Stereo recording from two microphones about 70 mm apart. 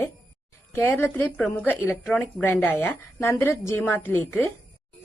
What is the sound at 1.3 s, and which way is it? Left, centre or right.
A woman's voice, left.